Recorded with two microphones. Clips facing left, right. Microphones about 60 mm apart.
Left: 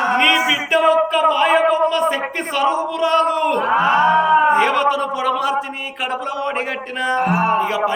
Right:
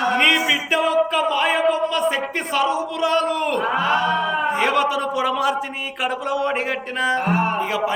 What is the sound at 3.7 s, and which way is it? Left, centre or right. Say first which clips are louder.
Mantra: left 7 dB; left.